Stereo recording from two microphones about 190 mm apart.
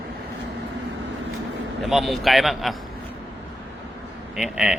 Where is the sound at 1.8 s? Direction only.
Centre (ahead or behind).